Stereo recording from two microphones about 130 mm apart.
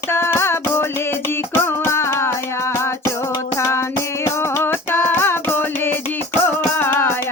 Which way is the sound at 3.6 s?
20° left (ahead or behind).